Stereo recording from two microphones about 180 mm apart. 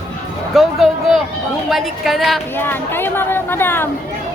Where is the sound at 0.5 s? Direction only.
Centre (ahead or behind).